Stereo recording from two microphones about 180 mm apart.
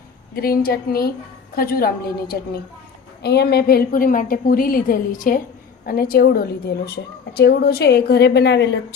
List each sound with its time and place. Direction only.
0.3 s a woman's voice: 55° left (ahead or behind); by 8.8 s 75° left (ahead or behind)